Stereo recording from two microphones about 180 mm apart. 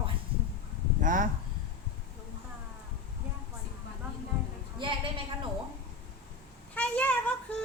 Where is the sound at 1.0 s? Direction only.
45° right (ahead or behind).